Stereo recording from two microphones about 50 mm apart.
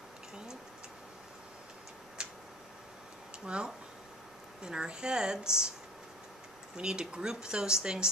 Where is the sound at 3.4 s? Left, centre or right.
Centre.